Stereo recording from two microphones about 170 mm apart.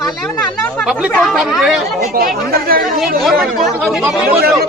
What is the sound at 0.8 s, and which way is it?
A man's voice, 5° right (ahead or behind).